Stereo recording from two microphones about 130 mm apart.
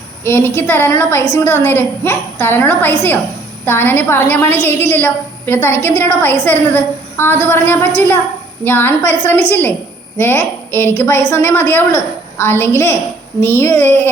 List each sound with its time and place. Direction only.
0.3 s a woman's voice: 15° left (ahead or behind)